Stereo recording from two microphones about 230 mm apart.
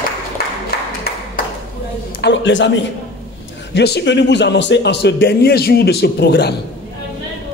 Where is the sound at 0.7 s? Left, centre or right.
Left.